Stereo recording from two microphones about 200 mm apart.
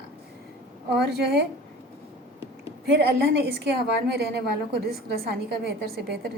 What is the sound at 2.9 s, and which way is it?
A woman's voice, 55° right (ahead or behind).